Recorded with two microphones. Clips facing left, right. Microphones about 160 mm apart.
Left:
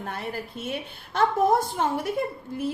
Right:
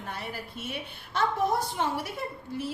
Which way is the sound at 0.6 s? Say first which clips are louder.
Left 5 dB; 50° left (ahead or behind).